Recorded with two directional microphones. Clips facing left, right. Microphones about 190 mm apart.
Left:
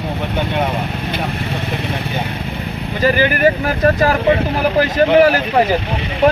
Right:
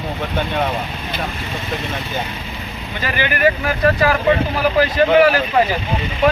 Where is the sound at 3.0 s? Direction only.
40° left (ahead or behind).